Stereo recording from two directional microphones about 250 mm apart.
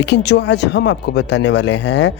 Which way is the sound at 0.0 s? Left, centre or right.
Left.